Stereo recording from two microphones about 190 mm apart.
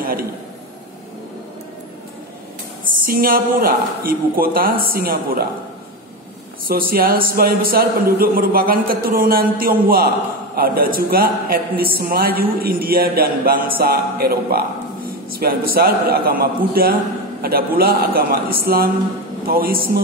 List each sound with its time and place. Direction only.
0.0 s a sound: 50° right (ahead or behind)
3.1 s a man's voice: 50° right (ahead or behind)
6.7 s a man's voice: 50° right (ahead or behind)